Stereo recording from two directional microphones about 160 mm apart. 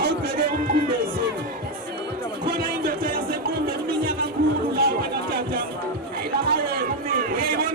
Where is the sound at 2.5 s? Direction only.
70° right (ahead or behind).